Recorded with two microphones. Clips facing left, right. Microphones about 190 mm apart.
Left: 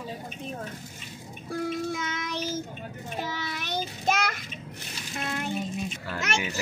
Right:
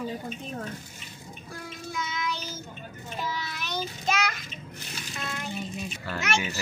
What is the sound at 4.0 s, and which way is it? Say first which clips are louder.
Child singing: left 2 dB; 55° left (ahead or behind).